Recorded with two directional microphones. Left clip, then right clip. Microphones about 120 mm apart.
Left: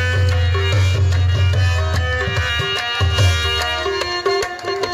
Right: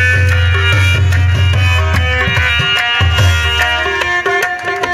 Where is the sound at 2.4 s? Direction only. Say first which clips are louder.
Right 8 dB; 40° left (ahead or behind).